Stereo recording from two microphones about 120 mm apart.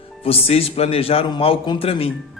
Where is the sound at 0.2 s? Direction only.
55° left (ahead or behind).